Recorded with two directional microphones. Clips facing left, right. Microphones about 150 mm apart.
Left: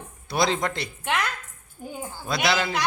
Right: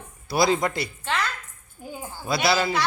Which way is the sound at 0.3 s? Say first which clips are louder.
Right 3 dB; 5° right (ahead or behind).